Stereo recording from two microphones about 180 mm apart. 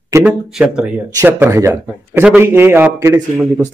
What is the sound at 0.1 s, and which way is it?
Speech, 10° right (ahead or behind).